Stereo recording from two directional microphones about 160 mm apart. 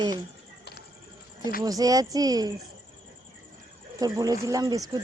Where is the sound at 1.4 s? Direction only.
65° left (ahead or behind).